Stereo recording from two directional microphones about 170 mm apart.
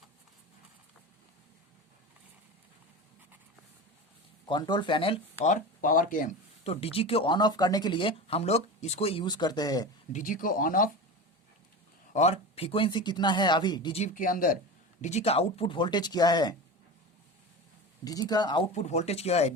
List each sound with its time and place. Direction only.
4.4 s speech: 25° left (ahead or behind)
5.5 s speech: 50° left (ahead or behind)
6.7 s speech: 35° left (ahead or behind)
10.1 s speech: 50° left (ahead or behind)
12.1 s speech: 40° left (ahead or behind)
14.0 s speech: 50° left (ahead or behind)
15.0 s speech: 40° left (ahead or behind); by 16.6 s 25° left (ahead or behind)
18.0 s speech: 20° left (ahead or behind)
18.7 s speech: 40° left (ahead or behind)